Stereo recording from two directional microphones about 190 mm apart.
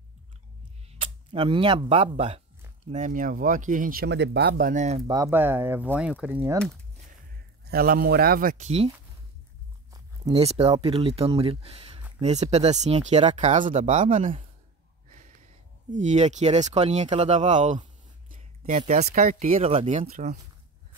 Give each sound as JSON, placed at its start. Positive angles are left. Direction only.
{"t": 1.0, "sound": "speech", "side_deg": -25}
{"t": 2.9, "sound": "speech", "side_deg": -45}
{"t": 5.0, "sound": "speech", "side_deg": -20}
{"t": 7.7, "sound": "speech", "side_deg": -50}
{"t": 10.3, "sound": "speech", "side_deg": -30}
{"t": 15.9, "sound": "speech", "side_deg": -40}